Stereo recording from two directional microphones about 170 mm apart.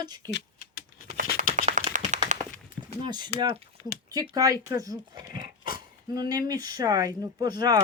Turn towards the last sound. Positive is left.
turn(degrees=-25)  # may be behind; listen again after turning